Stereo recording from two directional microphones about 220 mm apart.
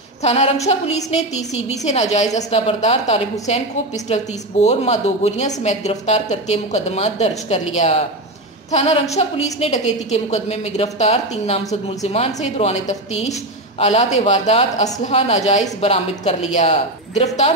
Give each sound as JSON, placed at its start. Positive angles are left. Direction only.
{"t": 0.2, "sound": "a woman's voice", "side_deg": 30}